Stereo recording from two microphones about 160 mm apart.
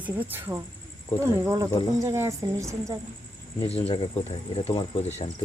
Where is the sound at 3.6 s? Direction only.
40° left (ahead or behind).